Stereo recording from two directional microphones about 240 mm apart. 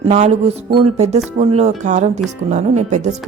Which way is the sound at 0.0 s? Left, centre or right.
Right.